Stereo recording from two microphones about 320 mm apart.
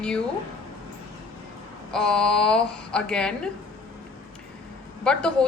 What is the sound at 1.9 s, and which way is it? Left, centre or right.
A woman's voice, centre.